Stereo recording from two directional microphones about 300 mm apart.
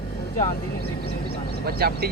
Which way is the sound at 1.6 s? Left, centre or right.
Right.